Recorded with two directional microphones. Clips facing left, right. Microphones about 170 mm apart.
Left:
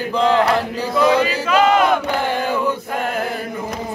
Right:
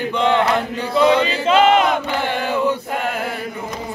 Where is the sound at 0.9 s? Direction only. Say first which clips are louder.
Right 1 dB; 25° right (ahead or behind).